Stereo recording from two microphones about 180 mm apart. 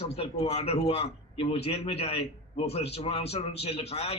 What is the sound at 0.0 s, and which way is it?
A man's voice, 35° left (ahead or behind).